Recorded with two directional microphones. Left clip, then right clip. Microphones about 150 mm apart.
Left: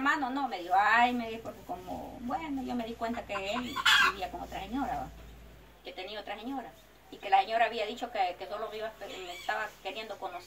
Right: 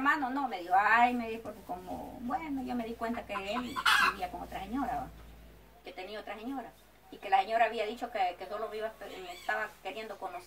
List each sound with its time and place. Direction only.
0.0 s a sound: 15° right (ahead or behind)
0.5 s a woman's voice: 10° right (ahead or behind)
3.7 s chicken: 55° left (ahead or behind)
4.6 s a woman's voice: 10° right (ahead or behind)
5.9 s a woman's voice: 15° right (ahead or behind)